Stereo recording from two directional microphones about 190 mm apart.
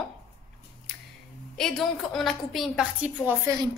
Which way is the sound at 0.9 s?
Centre (ahead or behind).